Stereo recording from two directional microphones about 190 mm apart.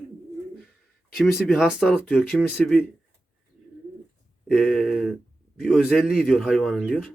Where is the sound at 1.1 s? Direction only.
Centre (ahead or behind).